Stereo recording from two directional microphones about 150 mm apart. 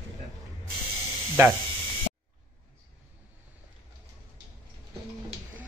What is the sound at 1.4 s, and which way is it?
Speech, 20° right (ahead or behind).